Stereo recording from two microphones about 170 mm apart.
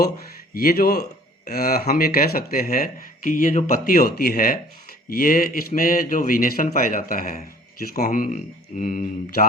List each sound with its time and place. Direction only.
0.5 s speech: 60° left (ahead or behind)